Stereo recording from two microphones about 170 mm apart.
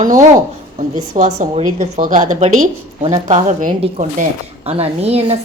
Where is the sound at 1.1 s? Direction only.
45° right (ahead or behind).